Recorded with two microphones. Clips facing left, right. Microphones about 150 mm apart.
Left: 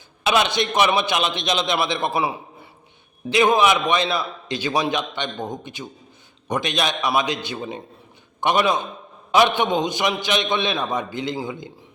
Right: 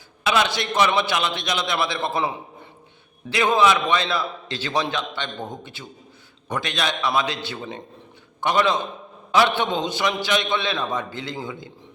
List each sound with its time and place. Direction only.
0.3 s a man's voice: 20° left (ahead or behind)